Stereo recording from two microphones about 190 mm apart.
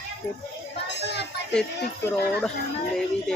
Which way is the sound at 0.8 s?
65° left (ahead or behind).